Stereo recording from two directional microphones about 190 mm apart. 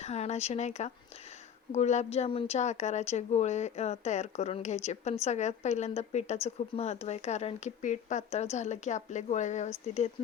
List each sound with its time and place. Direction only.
0.0 s a woman's voice: 35° left (ahead or behind)